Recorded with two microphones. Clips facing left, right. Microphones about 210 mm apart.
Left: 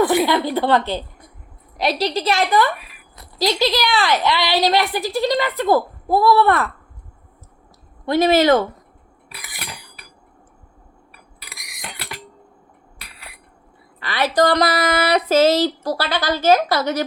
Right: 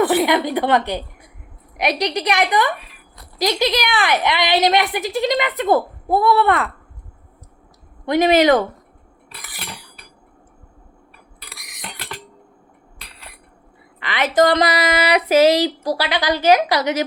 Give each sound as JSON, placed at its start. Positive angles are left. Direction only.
{"t": 0.3, "sound": "a woman's voice", "side_deg": -20}
{"t": 8.0, "sound": "speech", "side_deg": -15}
{"t": 9.3, "sound": "cutlery", "side_deg": 10}
{"t": 11.4, "sound": "cutlery", "side_deg": 10}
{"t": 14.0, "sound": "speech", "side_deg": -20}